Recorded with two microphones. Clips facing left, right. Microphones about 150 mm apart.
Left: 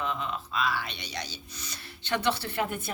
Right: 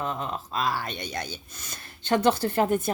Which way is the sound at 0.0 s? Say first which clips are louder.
Right 2 dB; 40° right (ahead or behind).